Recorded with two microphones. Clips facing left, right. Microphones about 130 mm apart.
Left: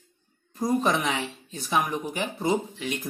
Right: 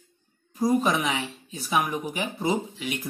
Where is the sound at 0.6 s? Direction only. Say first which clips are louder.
Right 1 dB; 10° right (ahead or behind).